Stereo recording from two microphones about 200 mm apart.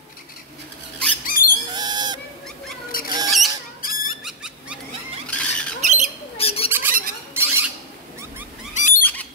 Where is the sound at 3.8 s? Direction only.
45° left (ahead or behind).